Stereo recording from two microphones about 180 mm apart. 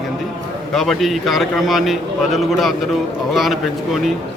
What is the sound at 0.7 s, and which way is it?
A man's voice, centre (ahead or behind).